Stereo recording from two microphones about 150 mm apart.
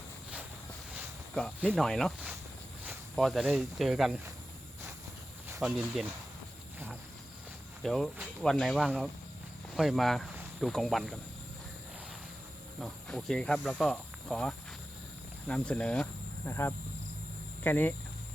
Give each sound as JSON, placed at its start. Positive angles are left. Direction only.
{"t": 1.3, "sound": "speech", "side_deg": 5}
{"t": 3.2, "sound": "speech", "side_deg": 0}
{"t": 5.5, "sound": "speech", "side_deg": 0}
{"t": 7.8, "sound": "speech", "side_deg": 0}
{"t": 12.8, "sound": "speech", "side_deg": 5}